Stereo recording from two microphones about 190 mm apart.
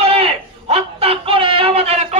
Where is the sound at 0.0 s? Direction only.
30° right (ahead or behind).